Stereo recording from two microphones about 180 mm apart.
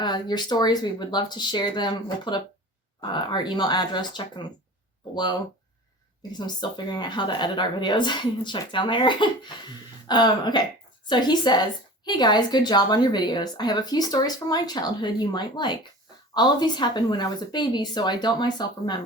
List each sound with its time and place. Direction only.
0.0 s a woman's voice: 25° left (ahead or behind)
6.4 s a woman's voice: 25° left (ahead or behind)